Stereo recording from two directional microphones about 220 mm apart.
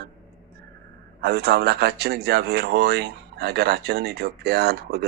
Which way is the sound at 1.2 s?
50° right (ahead or behind).